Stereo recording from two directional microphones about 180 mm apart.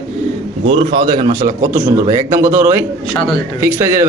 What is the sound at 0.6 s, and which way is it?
A man's voice, 30° right (ahead or behind).